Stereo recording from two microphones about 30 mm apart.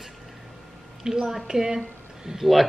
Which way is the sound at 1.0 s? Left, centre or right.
Centre.